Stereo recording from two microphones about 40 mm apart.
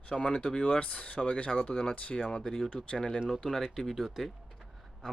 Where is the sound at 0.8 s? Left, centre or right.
Left; by 2.6 s centre.